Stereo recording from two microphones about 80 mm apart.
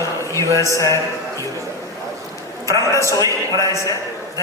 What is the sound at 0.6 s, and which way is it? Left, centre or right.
Speech, left.